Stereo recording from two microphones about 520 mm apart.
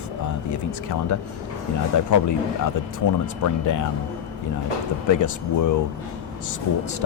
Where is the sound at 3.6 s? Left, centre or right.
Left.